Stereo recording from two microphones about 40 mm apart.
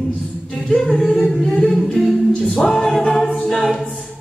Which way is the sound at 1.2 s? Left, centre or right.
Centre.